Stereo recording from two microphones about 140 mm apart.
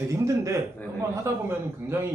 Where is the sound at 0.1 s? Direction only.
20° right (ahead or behind).